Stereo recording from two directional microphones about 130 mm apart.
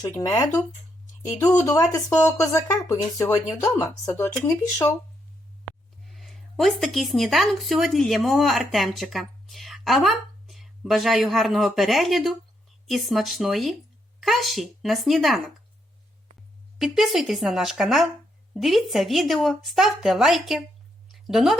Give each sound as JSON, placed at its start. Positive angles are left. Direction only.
{"t": 0.2, "sound": "speech", "side_deg": 25}
{"t": 6.1, "sound": "speech", "side_deg": 0}
{"t": 16.7, "sound": "speech", "side_deg": 0}
{"t": 21.1, "sound": "a sound", "side_deg": 0}